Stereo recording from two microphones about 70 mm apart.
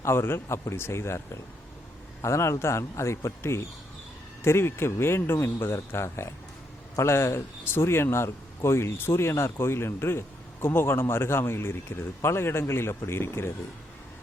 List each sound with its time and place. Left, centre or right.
0.0 s speech: left
2.2 s a man's voice: left